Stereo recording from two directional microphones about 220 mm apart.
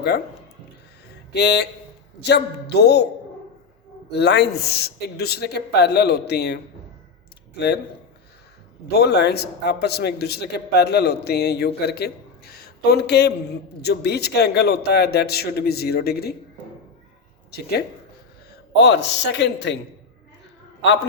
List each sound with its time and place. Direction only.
1.3 s a man's voice: 50° left (ahead or behind)
4.1 s a man's voice: 50° left (ahead or behind)
8.9 s a man's voice: 50° left (ahead or behind)
17.5 s a man's voice: 45° left (ahead or behind)
20.8 s a man's voice: 55° left (ahead or behind)